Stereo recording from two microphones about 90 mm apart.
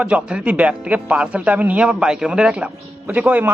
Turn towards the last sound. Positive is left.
turn(degrees=-15)  # may be behind; listen again after turning